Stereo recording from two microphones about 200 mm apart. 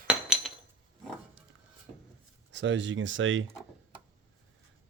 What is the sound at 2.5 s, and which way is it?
Speech, 65° right (ahead or behind).